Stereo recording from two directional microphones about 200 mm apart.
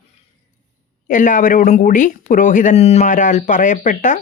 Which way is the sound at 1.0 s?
40° left (ahead or behind).